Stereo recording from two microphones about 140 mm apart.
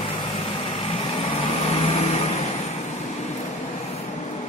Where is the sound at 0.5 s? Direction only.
45° left (ahead or behind).